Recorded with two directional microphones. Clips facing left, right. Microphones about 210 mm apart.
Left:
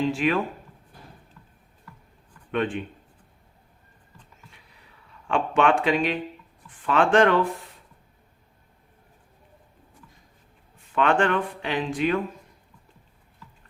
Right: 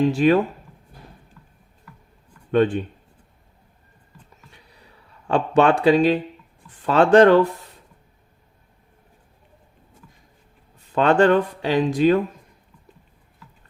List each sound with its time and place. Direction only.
0.0 s speech: 40° right (ahead or behind)
2.5 s speech: 35° right (ahead or behind)
5.3 s speech: 35° right (ahead or behind)
10.9 s speech: 40° right (ahead or behind)